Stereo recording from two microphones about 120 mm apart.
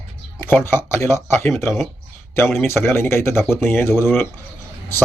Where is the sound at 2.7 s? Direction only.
20° left (ahead or behind).